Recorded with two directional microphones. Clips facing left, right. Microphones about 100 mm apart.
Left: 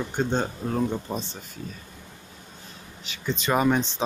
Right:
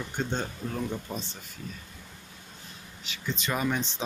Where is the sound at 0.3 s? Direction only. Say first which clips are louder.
Left 6 dB; 45° left (ahead or behind).